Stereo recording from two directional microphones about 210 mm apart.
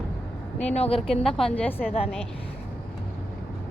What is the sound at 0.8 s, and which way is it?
Speech, 30° left (ahead or behind).